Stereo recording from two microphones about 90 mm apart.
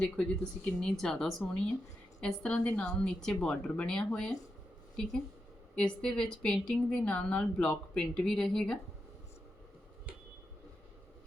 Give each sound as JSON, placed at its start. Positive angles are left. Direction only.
{"t": 0.2, "sound": "a woman's voice", "side_deg": 10}
{"t": 5.7, "sound": "a woman's voice", "side_deg": 10}